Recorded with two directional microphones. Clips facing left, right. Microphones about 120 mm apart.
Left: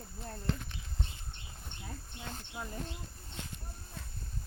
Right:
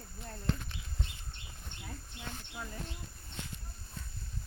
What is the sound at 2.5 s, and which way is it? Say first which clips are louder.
Speech: left 3 dB; 20° left (ahead or behind).